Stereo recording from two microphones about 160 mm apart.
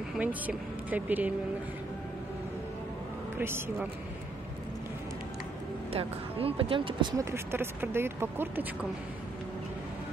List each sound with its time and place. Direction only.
0.1 s speech: 10° right (ahead or behind)
3.3 s speech: 15° right (ahead or behind)
5.9 s speech: 35° right (ahead or behind); by 8.6 s 15° right (ahead or behind)